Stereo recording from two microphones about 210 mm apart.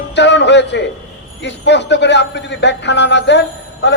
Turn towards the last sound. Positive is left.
turn(degrees=55)  # may be behind; listen again after turning